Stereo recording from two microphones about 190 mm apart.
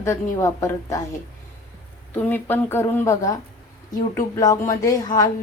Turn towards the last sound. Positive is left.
turn(degrees=20)  # may be behind; listen again after turning